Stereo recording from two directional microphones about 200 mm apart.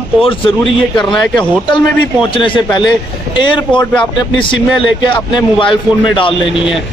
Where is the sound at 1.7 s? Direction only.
25° left (ahead or behind).